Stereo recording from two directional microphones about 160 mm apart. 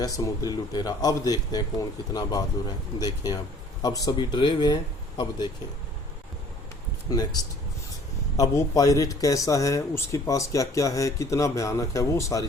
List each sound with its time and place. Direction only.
0.0 s speech: 20° left (ahead or behind)
7.1 s speech: 25° left (ahead or behind)